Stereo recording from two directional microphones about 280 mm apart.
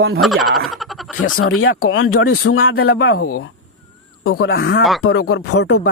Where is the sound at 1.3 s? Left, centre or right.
Left.